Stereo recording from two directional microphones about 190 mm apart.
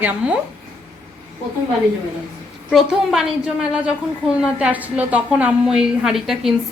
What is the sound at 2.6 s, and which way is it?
Speech, centre (ahead or behind).